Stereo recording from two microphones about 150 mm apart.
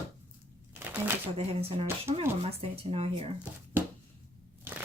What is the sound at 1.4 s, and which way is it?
Speech, 40° right (ahead or behind).